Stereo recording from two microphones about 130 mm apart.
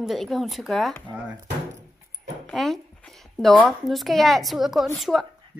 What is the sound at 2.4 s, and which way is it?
Speech, centre (ahead or behind).